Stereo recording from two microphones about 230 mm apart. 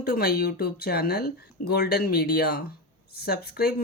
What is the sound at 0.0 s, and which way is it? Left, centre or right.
A woman's voice, left.